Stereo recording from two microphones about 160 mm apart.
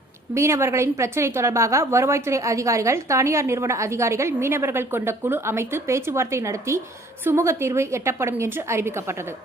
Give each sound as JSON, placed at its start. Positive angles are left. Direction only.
{"t": 0.3, "sound": "a woman's voice", "side_deg": -15}